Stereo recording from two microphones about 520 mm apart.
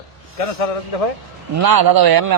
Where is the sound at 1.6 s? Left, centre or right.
Right.